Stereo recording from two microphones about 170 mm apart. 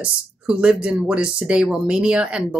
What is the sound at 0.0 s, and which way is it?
Speech, 5° right (ahead or behind).